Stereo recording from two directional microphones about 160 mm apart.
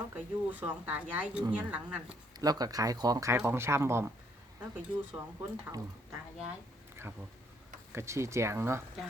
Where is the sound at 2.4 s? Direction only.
25° right (ahead or behind).